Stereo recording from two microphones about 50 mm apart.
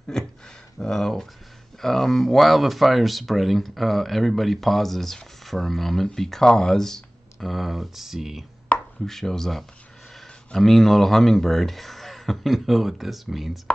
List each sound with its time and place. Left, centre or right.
0.1 s speech: centre
7.3 s speech: centre
8.7 s chopping: left
9.0 s speech: centre